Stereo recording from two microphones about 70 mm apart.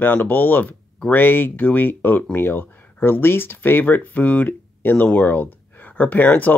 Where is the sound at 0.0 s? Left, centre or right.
Left.